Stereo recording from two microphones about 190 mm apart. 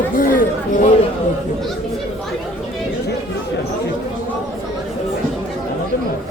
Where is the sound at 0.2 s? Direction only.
45° left (ahead or behind).